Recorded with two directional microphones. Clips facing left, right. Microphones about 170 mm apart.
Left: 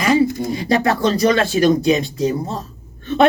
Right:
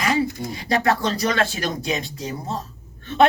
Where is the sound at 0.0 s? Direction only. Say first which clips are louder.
Left 7 dB; 30° left (ahead or behind).